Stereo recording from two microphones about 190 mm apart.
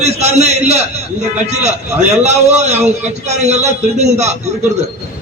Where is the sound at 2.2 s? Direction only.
35° right (ahead or behind).